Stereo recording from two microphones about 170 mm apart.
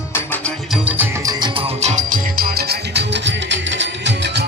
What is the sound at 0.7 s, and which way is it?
Music, 5° right (ahead or behind).